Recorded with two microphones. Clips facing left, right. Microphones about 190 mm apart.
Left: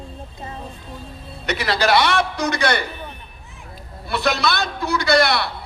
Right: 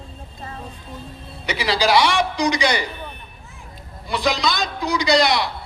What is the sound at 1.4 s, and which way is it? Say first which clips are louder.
A man's voice: even; 10° right (ahead or behind).